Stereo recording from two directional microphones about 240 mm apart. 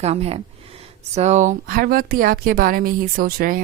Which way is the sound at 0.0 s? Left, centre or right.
Right.